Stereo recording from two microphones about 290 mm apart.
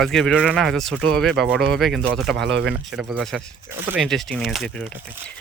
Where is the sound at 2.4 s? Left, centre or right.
Right.